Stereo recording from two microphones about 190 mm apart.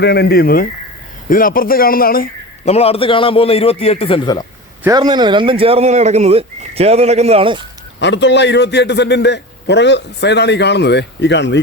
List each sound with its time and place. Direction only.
0.0 s a man's voice: 60° left (ahead or behind)
2.6 s a man's voice: 30° left (ahead or behind)
4.8 s speech: 20° right (ahead or behind)
7.9 s a man's voice: 70° left (ahead or behind)